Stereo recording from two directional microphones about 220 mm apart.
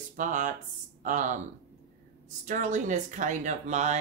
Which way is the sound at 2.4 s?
35° right (ahead or behind).